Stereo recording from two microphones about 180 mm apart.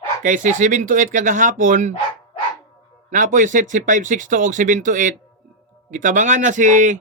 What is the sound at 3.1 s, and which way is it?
Speech, 45° right (ahead or behind).